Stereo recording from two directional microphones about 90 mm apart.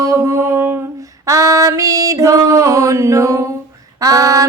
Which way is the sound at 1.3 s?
35° right (ahead or behind).